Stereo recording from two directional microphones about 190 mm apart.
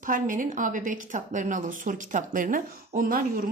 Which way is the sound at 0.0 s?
45° right (ahead or behind).